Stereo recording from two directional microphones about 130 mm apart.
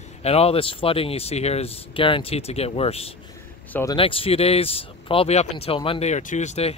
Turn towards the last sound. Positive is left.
turn(degrees=60)  # may be behind; listen again after turning